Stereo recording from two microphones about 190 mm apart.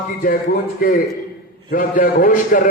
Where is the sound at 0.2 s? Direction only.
50° left (ahead or behind).